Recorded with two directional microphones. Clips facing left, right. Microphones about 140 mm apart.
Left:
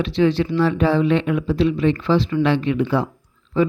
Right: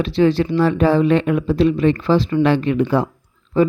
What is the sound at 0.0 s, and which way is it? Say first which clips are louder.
Speech: right 2 dB; 40° right (ahead or behind).